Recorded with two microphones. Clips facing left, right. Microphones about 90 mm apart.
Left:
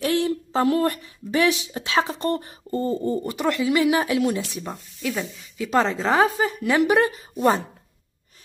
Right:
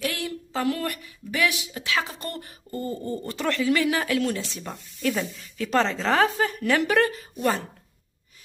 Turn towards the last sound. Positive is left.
turn(degrees=20)  # may be behind; listen again after turning